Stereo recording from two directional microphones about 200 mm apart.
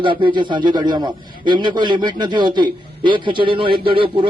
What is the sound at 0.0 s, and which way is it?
A man's voice, 25° right (ahead or behind).